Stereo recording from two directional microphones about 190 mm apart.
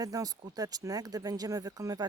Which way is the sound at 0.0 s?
20° right (ahead or behind).